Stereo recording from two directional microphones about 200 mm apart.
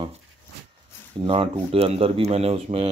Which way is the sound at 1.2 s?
30° right (ahead or behind).